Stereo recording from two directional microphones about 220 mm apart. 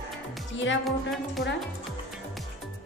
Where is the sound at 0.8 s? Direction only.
Centre (ahead or behind).